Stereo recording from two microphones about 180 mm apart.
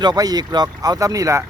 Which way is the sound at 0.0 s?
20° right (ahead or behind).